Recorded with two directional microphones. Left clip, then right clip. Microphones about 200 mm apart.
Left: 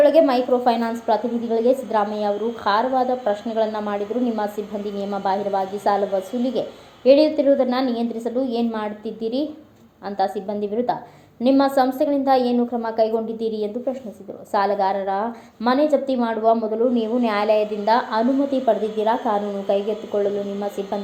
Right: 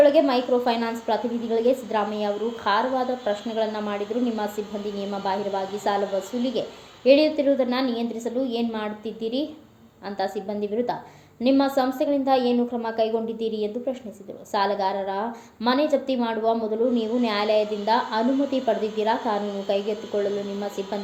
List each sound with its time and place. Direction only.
0.0 s a woman's voice: 20° left (ahead or behind)